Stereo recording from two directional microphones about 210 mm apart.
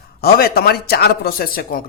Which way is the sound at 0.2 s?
45° left (ahead or behind).